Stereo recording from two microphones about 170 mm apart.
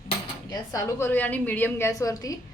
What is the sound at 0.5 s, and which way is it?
A woman's voice, 20° left (ahead or behind).